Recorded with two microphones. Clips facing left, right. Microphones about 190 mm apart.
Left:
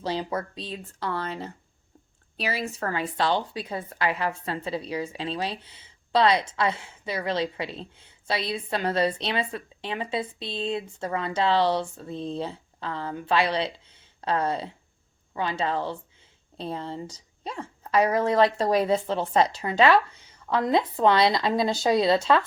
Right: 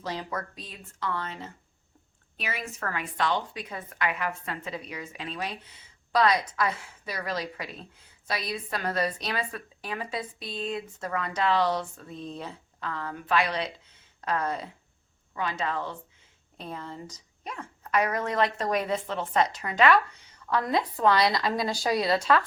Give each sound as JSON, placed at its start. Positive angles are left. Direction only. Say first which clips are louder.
{"t": 0.0, "sound": "a woman's voice", "louder": "left 5 dB", "side_deg": 30}